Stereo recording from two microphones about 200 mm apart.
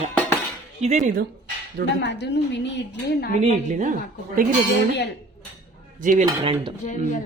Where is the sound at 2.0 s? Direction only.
60° left (ahead or behind).